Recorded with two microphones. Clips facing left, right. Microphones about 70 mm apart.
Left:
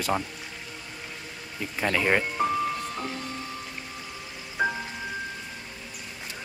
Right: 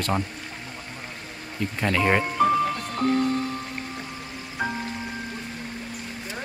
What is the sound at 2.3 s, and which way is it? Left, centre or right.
Music, right.